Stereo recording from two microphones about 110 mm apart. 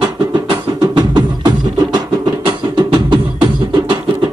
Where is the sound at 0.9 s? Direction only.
40° right (ahead or behind).